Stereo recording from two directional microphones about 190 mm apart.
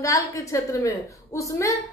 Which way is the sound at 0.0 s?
15° left (ahead or behind).